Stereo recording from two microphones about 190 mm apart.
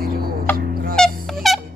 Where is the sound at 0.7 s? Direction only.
50° right (ahead or behind).